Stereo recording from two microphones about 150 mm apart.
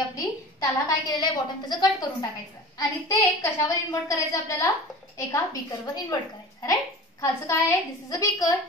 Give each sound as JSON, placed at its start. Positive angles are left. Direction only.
{"t": 0.1, "sound": "a woman's voice", "side_deg": 25}
{"t": 3.1, "sound": "a woman's voice", "side_deg": 20}